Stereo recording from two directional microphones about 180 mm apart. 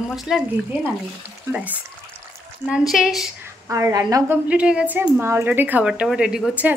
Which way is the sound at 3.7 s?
20° right (ahead or behind).